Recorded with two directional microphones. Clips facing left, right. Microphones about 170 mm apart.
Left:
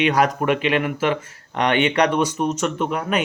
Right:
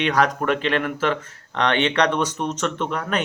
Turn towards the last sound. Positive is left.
turn(degrees=10)  # may be behind; listen again after turning